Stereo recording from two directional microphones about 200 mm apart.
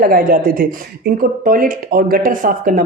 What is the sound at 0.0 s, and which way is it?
Speech, 45° right (ahead or behind).